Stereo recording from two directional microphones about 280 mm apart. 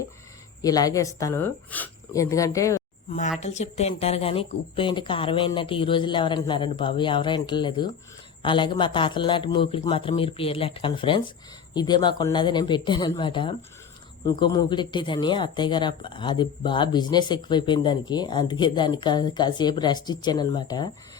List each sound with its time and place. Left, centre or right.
0.6 s speech: centre
3.4 s speech: left